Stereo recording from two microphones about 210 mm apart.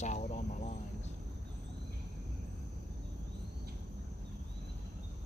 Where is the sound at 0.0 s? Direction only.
35° left (ahead or behind).